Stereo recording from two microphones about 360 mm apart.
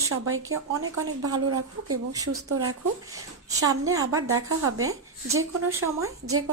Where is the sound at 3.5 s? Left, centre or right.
Centre.